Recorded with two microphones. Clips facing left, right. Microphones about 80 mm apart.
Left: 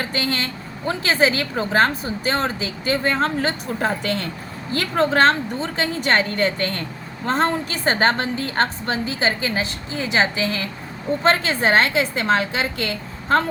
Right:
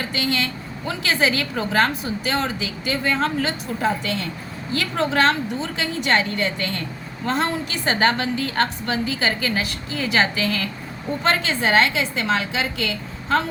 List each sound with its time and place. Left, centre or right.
0.0 s a woman's voice: left